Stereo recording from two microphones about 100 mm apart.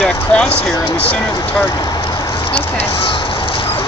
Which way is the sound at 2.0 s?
40° left (ahead or behind).